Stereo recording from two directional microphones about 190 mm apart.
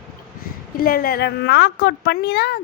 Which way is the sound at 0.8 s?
50° left (ahead or behind).